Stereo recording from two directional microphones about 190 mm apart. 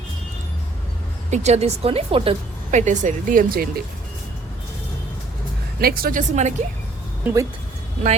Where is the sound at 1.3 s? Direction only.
35° right (ahead or behind).